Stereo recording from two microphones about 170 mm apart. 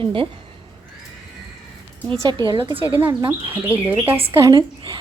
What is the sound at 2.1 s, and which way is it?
Speech, 25° right (ahead or behind).